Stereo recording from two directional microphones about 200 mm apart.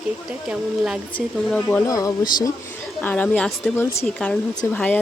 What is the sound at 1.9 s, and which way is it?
Speech, 15° left (ahead or behind).